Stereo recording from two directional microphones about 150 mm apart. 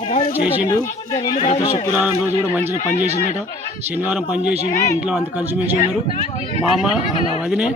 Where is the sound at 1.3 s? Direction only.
45° left (ahead or behind).